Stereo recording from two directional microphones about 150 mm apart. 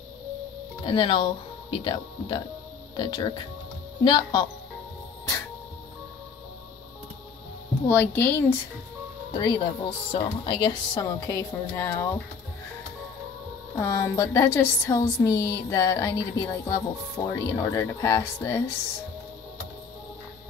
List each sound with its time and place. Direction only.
0.8 s a woman's voice: 35° left (ahead or behind)
7.9 s speech: 10° left (ahead or behind)
9.3 s a woman's voice: 30° left (ahead or behind)
13.7 s a woman's voice: 20° left (ahead or behind)